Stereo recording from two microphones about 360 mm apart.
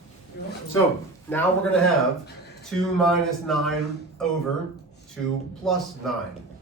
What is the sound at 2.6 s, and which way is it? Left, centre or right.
Speech, centre.